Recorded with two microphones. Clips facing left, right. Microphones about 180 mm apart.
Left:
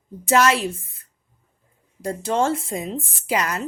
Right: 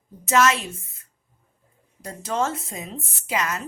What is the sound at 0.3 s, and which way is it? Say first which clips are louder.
A woman's voice: left 2 dB; 30° left (ahead or behind).